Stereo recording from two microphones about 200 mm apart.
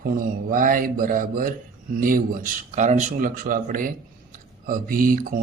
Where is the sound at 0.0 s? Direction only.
45° right (ahead or behind).